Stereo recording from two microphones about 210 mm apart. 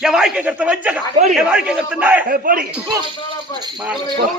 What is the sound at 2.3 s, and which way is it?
Speech, 45° right (ahead or behind).